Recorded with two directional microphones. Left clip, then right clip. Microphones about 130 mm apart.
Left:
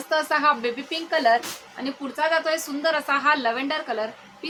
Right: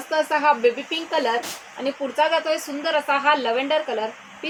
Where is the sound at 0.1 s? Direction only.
25° left (ahead or behind).